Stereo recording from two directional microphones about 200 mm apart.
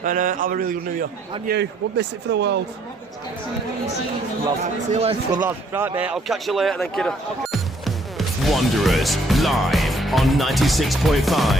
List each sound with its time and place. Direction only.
0.0 s a man's voice: 40° right (ahead or behind)
1.5 s a man's voice: 60° right (ahead or behind)
4.6 s speech: 30° right (ahead or behind)
5.4 s speech: 10° right (ahead or behind)